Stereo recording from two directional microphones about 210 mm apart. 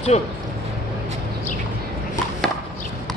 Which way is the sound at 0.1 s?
30° left (ahead or behind).